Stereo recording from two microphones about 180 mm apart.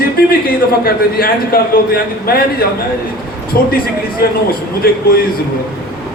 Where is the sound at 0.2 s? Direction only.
55° left (ahead or behind).